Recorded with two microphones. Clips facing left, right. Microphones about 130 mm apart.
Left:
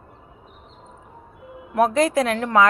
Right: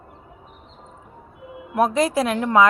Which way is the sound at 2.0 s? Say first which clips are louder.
Left 1 dB; 25° right (ahead or behind).